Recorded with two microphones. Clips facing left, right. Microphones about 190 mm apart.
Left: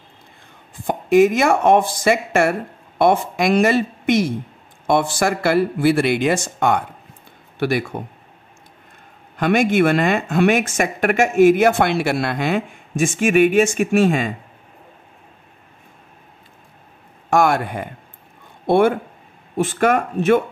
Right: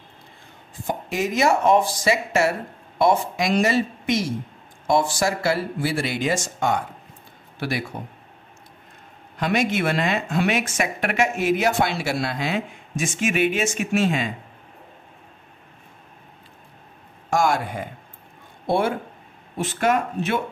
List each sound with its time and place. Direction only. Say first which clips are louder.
0.8 s speech: left 12 dB; 55° left (ahead or behind)
9.4 s speech: left 6 dB; 55° left (ahead or behind)
17.3 s speech: left 4 dB; 60° left (ahead or behind)